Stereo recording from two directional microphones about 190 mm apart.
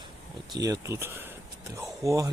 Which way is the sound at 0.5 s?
20° right (ahead or behind).